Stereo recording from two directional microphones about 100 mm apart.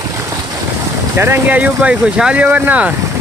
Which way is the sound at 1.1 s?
20° right (ahead or behind).